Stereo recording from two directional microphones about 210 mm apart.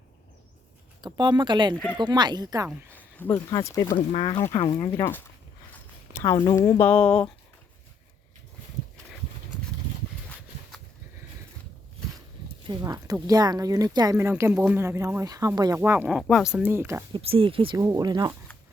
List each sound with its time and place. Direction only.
1.0 s speech: 20° right (ahead or behind)
3.2 s speech: 10° left (ahead or behind); by 4.4 s 25° left (ahead or behind)
4.4 s speech: 10° left (ahead or behind)
12.6 s speech: 15° right (ahead or behind); by 16.5 s centre (ahead or behind)
16.6 s speech: 10° right (ahead or behind)
17.2 s speech: 25° right (ahead or behind)